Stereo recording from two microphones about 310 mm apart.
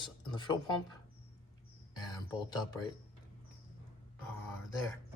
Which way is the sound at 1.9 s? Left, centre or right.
Centre.